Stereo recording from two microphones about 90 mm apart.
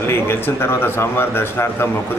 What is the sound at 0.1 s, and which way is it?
Speech, 25° left (ahead or behind).